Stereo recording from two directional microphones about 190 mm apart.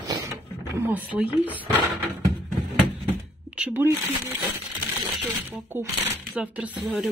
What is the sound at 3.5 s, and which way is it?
Speech, 10° right (ahead or behind).